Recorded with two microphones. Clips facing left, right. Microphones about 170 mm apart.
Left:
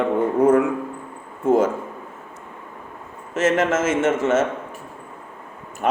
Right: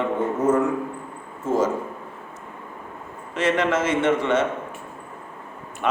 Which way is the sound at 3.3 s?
45° left (ahead or behind).